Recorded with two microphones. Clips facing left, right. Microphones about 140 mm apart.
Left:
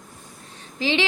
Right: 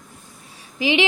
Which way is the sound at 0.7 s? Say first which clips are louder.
Right 3 dB; 15° right (ahead or behind).